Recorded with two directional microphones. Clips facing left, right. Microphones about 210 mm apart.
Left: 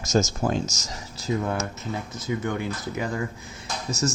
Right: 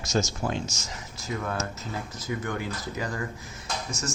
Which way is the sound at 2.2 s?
20° left (ahead or behind).